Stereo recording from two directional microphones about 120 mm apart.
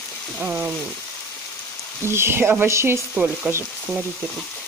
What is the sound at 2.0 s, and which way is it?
Frying, 20° right (ahead or behind).